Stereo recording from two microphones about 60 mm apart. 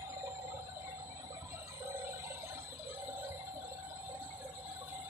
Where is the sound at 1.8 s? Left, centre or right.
Right.